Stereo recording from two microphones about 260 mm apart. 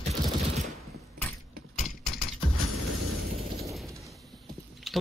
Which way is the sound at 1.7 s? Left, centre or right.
Left.